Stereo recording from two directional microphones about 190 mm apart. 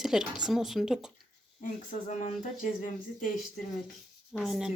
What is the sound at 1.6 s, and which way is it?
Speech, 40° left (ahead or behind).